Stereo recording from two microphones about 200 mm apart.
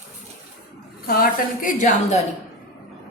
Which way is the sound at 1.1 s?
45° left (ahead or behind).